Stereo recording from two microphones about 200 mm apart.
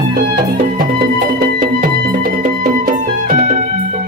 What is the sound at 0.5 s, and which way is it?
Music, 45° right (ahead or behind).